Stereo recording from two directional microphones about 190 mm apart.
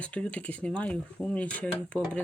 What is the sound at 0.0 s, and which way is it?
Speech, 5° left (ahead or behind).